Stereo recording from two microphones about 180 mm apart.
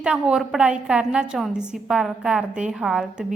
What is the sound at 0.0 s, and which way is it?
A woman's voice, 5° right (ahead or behind).